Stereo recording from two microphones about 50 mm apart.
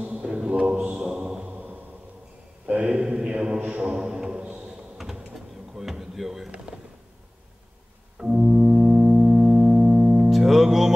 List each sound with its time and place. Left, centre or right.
0.0 s music: right
1.5 s a sound: right
2.6 s mantra: right
3.6 s music: right
4.6 s a sound: centre
8.2 s organ: centre
10.3 s music: centre